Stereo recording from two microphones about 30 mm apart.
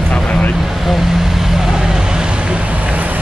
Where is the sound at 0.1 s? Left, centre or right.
Left.